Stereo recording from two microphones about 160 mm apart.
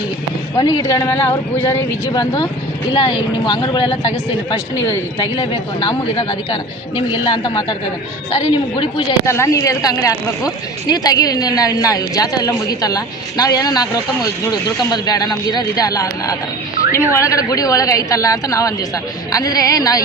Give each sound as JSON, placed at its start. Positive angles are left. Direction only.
{"t": 0.5, "sound": "speech", "side_deg": 25}
{"t": 4.5, "sound": "speech", "side_deg": 20}
{"t": 9.2, "sound": "speech", "side_deg": 15}